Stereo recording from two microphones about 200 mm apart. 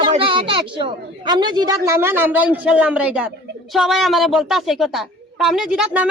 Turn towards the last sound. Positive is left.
turn(degrees=-5)  # may be behind; listen again after turning